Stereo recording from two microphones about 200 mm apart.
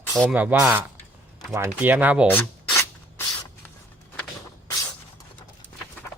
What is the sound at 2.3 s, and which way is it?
Filing, 10° left (ahead or behind).